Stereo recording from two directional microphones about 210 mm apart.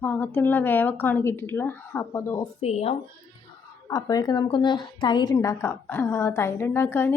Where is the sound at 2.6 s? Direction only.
30° left (ahead or behind).